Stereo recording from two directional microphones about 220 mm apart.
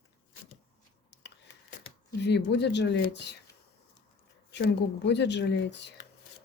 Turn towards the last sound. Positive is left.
turn(degrees=50)  # may be behind; listen again after turning